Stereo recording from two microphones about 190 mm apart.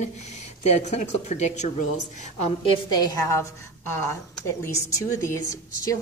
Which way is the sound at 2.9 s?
20° left (ahead or behind).